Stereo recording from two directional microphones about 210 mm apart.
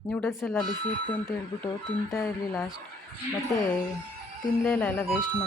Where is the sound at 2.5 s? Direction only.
Centre (ahead or behind).